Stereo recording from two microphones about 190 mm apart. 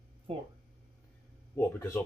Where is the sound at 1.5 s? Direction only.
10° left (ahead or behind).